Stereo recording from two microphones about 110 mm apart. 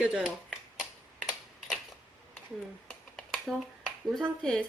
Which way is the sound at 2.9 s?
5° left (ahead or behind).